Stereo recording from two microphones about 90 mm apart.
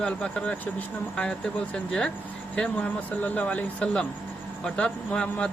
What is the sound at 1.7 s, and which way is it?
A man's voice, 10° left (ahead or behind).